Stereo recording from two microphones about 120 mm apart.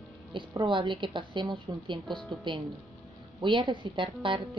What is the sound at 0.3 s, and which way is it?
A woman's voice, 40° right (ahead or behind).